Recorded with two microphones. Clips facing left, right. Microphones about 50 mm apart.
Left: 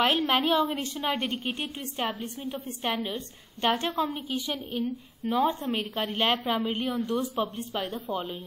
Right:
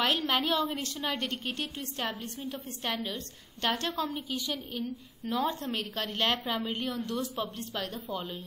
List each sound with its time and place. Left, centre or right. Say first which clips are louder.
0.0 s a woman's voice: left 4 dB; centre